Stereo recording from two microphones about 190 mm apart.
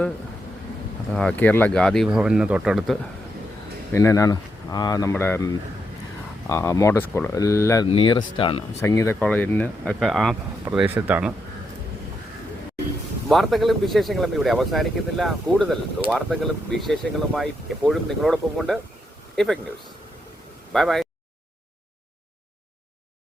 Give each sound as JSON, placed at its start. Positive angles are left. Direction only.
{"t": 1.1, "sound": "speech", "side_deg": 5}
{"t": 3.9, "sound": "speech", "side_deg": 15}
{"t": 6.5, "sound": "speech", "side_deg": 15}
{"t": 7.9, "sound": "speech", "side_deg": 25}
{"t": 8.8, "sound": "speech", "side_deg": 15}
{"t": 13.2, "sound": "speech", "side_deg": 0}
{"t": 20.7, "sound": "speech", "side_deg": 0}